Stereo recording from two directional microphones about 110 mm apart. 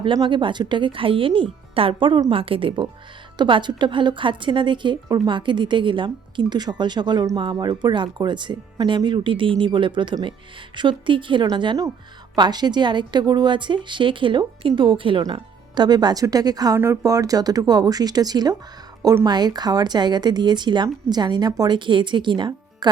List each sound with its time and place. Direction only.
0.0 s a woman's voice: 45° right (ahead or behind)
16.7 s a woman's voice: 25° right (ahead or behind); by 22.9 s 40° right (ahead or behind)